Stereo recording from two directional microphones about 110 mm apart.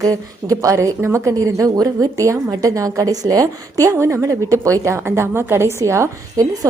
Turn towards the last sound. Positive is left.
turn(degrees=-30)  # may be behind; listen again after turning